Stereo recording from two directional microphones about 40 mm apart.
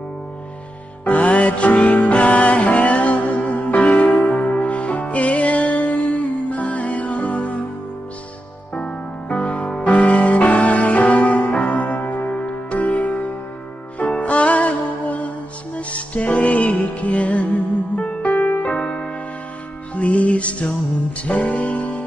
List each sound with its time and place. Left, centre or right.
1.0 s music: left
9.3 s music: left
12.3 s music: left
19.9 s music: left